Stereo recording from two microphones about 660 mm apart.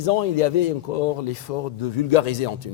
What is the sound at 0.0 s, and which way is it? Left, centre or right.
Speech, left.